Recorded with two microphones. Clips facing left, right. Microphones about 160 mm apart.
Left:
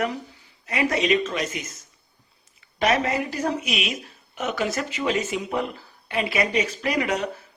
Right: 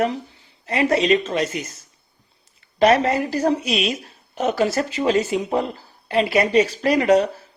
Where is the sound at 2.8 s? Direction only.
35° right (ahead or behind).